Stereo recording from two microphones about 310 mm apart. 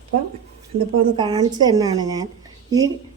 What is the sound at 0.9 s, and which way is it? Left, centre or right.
A woman's voice, centre.